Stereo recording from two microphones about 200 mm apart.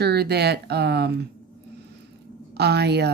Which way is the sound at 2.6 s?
55° right (ahead or behind).